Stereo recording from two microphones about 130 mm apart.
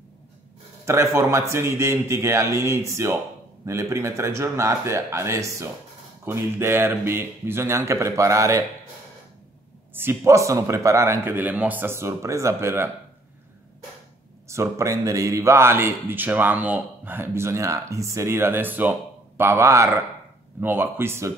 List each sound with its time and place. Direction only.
0.8 s speech: 20° right (ahead or behind)
9.9 s speech: 20° right (ahead or behind)
14.5 s speech: 25° right (ahead or behind)